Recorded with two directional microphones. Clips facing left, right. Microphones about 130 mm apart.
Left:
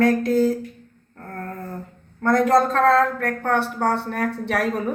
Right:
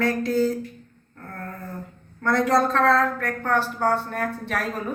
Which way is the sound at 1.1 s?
50° left (ahead or behind).